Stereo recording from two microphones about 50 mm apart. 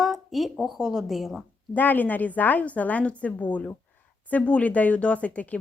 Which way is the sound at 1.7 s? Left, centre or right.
Left.